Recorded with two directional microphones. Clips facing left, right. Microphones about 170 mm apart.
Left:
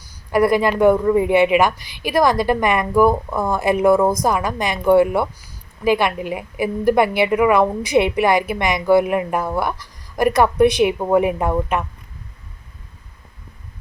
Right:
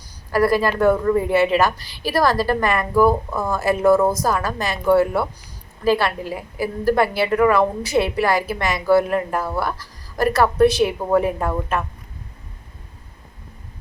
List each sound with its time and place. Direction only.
0.3 s a woman's voice: 20° left (ahead or behind)